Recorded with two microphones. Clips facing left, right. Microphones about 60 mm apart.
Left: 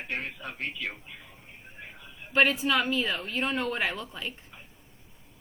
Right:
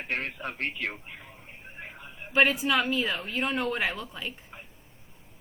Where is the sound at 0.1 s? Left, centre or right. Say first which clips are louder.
Right 4 dB; right.